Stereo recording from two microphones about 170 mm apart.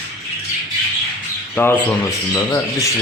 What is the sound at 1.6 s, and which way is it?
Speech, 10° left (ahead or behind).